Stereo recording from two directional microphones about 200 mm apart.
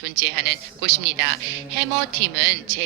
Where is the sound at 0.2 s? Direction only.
50° right (ahead or behind).